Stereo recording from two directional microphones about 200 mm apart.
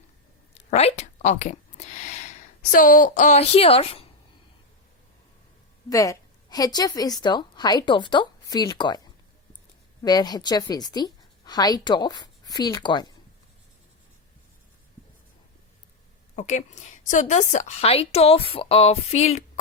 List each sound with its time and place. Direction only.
0.5 s speech: 30° left (ahead or behind)
5.9 s a woman's voice: 15° left (ahead or behind)
10.0 s a woman's voice: 20° left (ahead or behind)
16.3 s a woman's voice: 35° left (ahead or behind)